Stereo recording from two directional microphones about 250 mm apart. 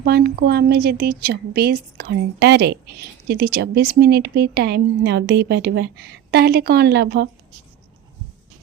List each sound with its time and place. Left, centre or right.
0.0 s speech: right